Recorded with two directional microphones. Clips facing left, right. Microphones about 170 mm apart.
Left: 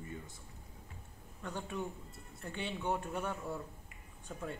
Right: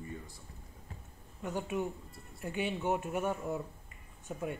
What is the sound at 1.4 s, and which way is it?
Speech, 15° right (ahead or behind).